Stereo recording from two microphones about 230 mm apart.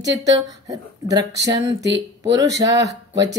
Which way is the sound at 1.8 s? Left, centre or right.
Right.